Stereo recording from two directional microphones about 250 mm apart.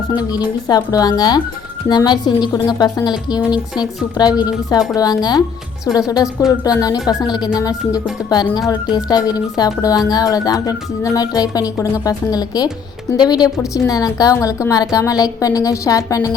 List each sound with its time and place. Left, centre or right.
0.1 s a woman's voice: centre